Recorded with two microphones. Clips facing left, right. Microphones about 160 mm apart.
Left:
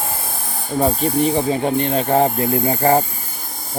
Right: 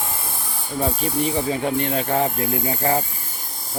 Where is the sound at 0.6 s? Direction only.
45° left (ahead or behind).